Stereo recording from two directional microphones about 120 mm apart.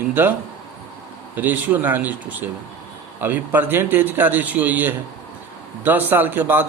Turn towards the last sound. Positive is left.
turn(degrees=-15)  # may be behind; listen again after turning